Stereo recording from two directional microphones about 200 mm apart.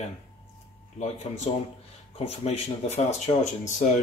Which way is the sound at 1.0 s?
35° left (ahead or behind).